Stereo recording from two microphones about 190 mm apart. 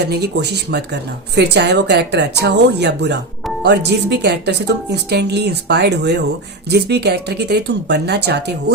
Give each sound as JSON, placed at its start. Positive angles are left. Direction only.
{"t": 0.1, "sound": "a woman's voice", "side_deg": -60}